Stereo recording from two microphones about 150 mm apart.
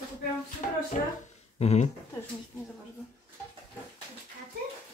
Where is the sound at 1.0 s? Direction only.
55° left (ahead or behind).